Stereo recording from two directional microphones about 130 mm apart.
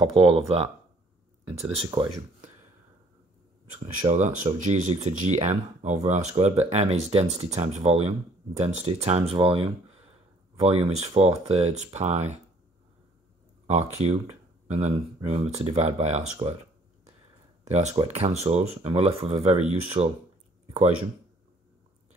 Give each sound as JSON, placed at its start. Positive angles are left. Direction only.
{"t": 0.0, "sound": "speech", "side_deg": -45}
{"t": 1.9, "sound": "speech", "side_deg": -35}
{"t": 3.8, "sound": "speech", "side_deg": -65}
{"t": 13.7, "sound": "speech", "side_deg": -60}
{"t": 17.6, "sound": "speech", "side_deg": -60}
{"t": 20.6, "sound": "a sound", "side_deg": -55}